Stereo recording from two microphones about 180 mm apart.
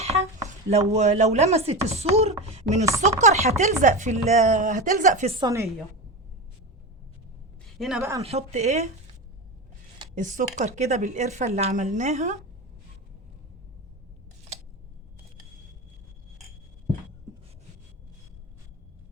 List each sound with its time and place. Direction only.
0.0 s a sound: 35° right (ahead or behind)
0.4 s speech: 40° right (ahead or behind)
2.4 s chopping: 40° right (ahead or behind)
3.0 s speech: 40° right (ahead or behind)
5.4 s a woman's voice: 15° right (ahead or behind)
7.8 s a woman's voice: 5° right (ahead or behind)
8.2 s speech: 35° right (ahead or behind)
10.2 s speech: 45° right (ahead or behind)